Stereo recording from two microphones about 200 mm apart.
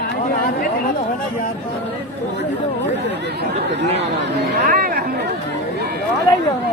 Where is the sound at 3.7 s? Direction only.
60° right (ahead or behind).